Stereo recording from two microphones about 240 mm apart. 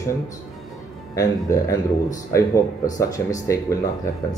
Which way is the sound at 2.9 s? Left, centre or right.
Centre.